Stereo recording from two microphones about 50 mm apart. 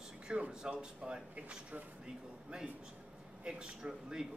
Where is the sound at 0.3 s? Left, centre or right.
Centre.